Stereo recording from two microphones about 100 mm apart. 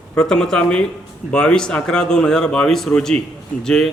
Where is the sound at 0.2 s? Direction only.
5° left (ahead or behind).